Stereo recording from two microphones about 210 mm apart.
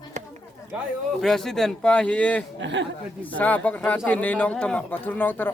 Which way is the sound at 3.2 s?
10° left (ahead or behind).